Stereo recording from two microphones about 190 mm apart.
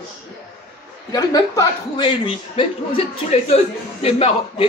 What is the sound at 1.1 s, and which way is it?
A man's voice, 20° left (ahead or behind).